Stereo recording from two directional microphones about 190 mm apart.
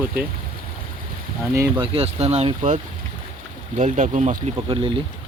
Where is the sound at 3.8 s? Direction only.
40° right (ahead or behind).